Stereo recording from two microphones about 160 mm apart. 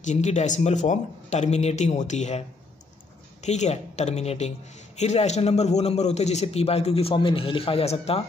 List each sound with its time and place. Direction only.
0.0 s speech: 45° left (ahead or behind)
3.4 s a woman's voice: 45° left (ahead or behind)